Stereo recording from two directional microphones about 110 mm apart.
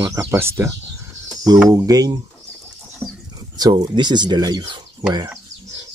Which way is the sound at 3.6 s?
40° right (ahead or behind).